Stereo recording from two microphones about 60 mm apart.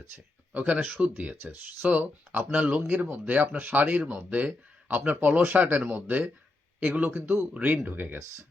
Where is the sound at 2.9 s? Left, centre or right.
Right.